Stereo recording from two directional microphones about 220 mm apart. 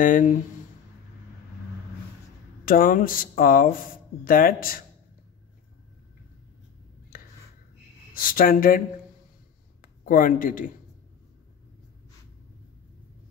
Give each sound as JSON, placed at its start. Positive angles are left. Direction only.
{"t": 0.0, "sound": "speech", "side_deg": 35}
{"t": 2.6, "sound": "speech", "side_deg": 40}
{"t": 7.1, "sound": "a sound", "side_deg": 40}
{"t": 8.1, "sound": "speech", "side_deg": 40}